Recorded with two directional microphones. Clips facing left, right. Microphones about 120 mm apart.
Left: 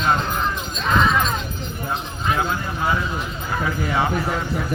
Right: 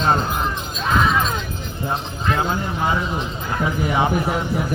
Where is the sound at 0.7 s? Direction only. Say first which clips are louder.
Even; 5° right (ahead or behind).